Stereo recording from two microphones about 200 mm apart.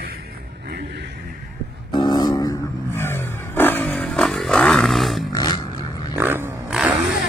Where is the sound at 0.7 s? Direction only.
60° right (ahead or behind).